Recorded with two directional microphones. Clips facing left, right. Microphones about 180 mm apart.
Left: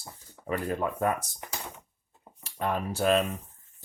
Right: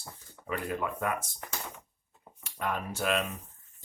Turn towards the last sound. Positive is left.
turn(degrees=35)  # may be behind; listen again after turning